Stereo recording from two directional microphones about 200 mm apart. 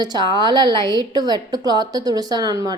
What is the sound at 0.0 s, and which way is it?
A woman's voice, 20° right (ahead or behind).